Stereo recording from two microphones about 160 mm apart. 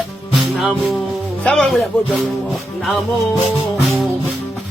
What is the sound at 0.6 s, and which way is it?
Speech, centre (ahead or behind).